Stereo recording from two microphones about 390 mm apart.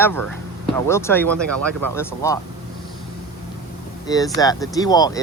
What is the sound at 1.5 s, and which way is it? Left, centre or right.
Speech, right.